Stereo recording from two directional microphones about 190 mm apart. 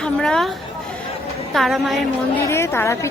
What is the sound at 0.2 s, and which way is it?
Speech, 5° left (ahead or behind).